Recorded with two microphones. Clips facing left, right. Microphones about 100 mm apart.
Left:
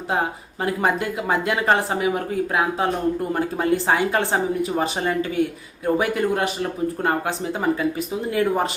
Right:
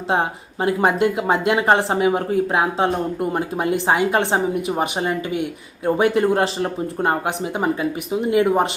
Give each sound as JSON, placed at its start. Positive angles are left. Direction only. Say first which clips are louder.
{"t": 0.1, "sound": "speech", "louder": "right 3 dB", "side_deg": -25}